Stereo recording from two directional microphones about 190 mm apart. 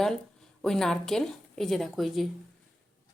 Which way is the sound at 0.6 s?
5° left (ahead or behind).